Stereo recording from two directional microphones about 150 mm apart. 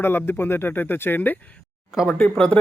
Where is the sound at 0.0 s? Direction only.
15° left (ahead or behind).